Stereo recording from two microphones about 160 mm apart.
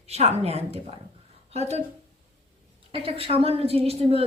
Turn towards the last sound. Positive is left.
turn(degrees=-40)  # may be behind; listen again after turning